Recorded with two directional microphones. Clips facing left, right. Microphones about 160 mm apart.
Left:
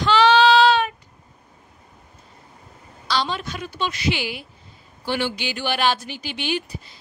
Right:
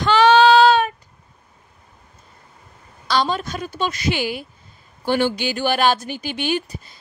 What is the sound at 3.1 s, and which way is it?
A woman's voice, 45° right (ahead or behind).